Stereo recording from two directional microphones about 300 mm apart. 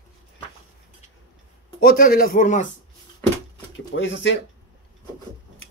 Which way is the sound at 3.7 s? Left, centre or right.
Left.